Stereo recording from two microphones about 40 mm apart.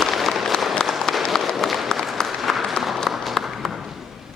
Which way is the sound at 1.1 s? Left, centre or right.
Left.